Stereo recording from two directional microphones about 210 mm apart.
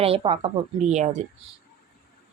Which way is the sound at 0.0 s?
25° right (ahead or behind).